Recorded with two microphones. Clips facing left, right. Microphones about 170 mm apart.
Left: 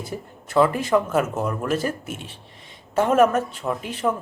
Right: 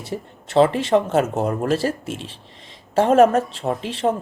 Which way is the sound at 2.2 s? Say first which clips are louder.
Right 3 dB; 90° right.